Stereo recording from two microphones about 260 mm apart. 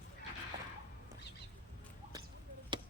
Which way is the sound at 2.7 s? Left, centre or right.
Centre.